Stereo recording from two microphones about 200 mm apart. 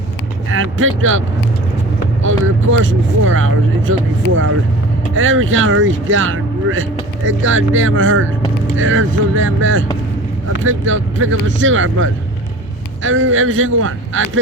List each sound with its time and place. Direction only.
0.5 s speech: 90° right
2.2 s speech: 85° right
5.1 s speech: 80° right